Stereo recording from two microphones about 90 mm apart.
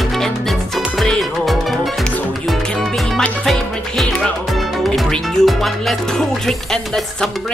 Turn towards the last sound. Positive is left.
turn(degrees=5)  # may be behind; listen again after turning